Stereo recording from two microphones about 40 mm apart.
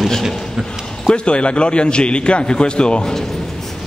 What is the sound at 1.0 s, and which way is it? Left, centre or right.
A man's voice, left.